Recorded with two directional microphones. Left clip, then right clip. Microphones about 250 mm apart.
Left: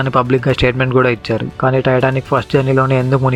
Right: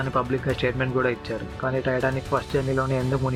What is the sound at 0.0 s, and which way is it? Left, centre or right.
Speech, left.